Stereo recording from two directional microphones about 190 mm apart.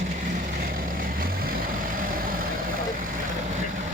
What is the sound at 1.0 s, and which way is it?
Vehicle, 50° right (ahead or behind).